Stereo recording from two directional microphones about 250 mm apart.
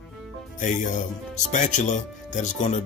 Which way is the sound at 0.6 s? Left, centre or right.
Left.